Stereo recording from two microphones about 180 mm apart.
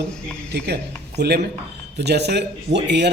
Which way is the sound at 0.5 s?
65° right (ahead or behind).